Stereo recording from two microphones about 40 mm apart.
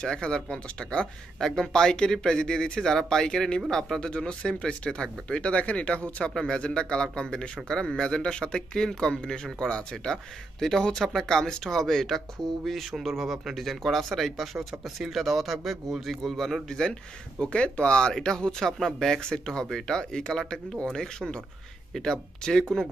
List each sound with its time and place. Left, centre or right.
0.0 s speech: centre
4.2 s speech: left
6.3 s speech: left
10.6 s speech: centre
17.4 s speech: left